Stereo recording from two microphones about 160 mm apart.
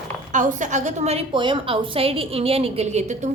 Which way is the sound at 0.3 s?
50° right (ahead or behind).